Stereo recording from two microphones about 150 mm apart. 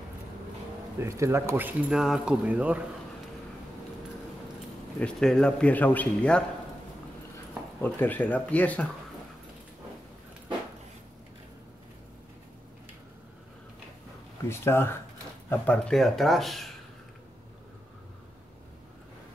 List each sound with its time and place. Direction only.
0.9 s speech: 20° right (ahead or behind)
4.9 s a man's voice: 5° left (ahead or behind)
7.8 s a man's voice: 10° left (ahead or behind)
14.5 s a man's voice: 15° left (ahead or behind)